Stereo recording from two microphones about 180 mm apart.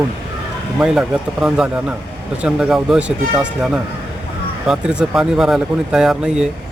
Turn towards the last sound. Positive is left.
turn(degrees=-5)  # may be behind; listen again after turning